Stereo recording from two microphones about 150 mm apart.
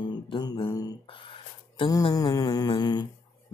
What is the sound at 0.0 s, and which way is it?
Mantra, 30° left (ahead or behind).